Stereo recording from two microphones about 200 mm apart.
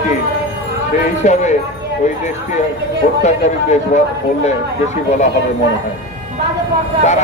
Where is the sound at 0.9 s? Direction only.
35° left (ahead or behind).